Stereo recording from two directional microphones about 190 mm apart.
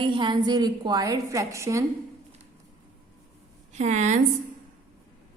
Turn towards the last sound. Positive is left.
turn(degrees=-40)  # may be behind; listen again after turning